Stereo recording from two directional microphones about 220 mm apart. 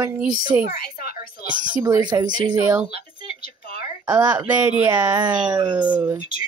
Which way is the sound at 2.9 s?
40° left (ahead or behind).